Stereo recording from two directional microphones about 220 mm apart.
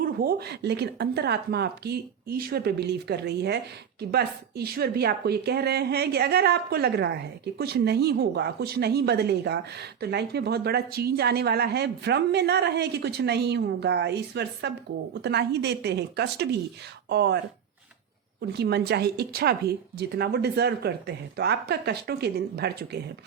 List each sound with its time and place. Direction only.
0.0 s a woman's voice: 45° right (ahead or behind)
18.5 s a woman's voice: 50° right (ahead or behind)